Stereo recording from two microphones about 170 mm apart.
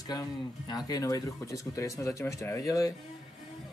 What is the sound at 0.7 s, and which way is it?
Speech, 20° left (ahead or behind).